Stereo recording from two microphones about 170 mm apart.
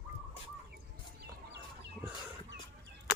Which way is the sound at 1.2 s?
80° right.